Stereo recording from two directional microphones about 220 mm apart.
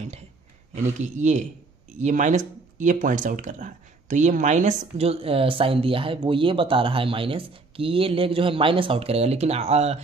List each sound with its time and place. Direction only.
0.8 s speech: 35° right (ahead or behind)